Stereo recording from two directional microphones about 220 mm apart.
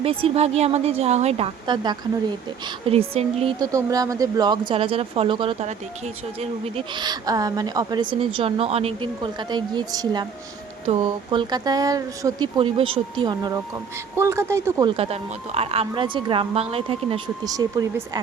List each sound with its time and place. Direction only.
0.0 s speech: 25° right (ahead or behind)
3.7 s speech: 15° right (ahead or behind)